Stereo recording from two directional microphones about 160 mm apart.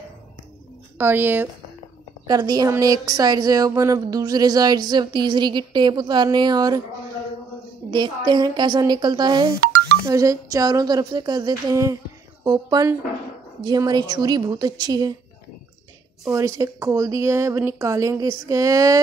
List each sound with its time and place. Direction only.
0.9 s speech: 15° right (ahead or behind)
2.2 s speech: 25° right (ahead or behind)
7.9 s speech: 25° right (ahead or behind)
16.3 s speech: 20° right (ahead or behind)